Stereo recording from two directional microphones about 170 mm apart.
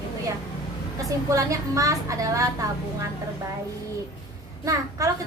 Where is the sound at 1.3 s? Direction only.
20° right (ahead or behind).